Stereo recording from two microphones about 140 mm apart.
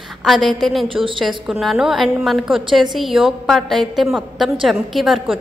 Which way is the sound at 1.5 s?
Centre (ahead or behind).